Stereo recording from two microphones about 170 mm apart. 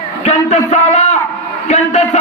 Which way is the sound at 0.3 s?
40° left (ahead or behind).